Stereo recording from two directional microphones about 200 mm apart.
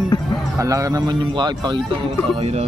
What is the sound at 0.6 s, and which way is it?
Speech, 15° right (ahead or behind).